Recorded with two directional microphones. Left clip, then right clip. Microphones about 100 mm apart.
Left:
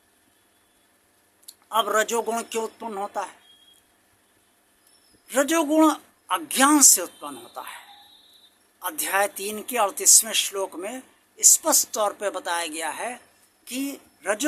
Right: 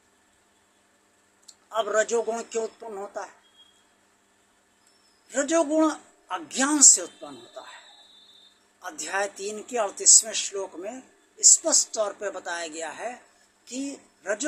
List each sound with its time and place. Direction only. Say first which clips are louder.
1.5 s a man's voice: left 4 dB; 25° left (ahead or behind)
5.3 s a man's voice: left 2 dB; 35° left (ahead or behind)
8.8 s speech: left 5 dB; 30° left (ahead or behind)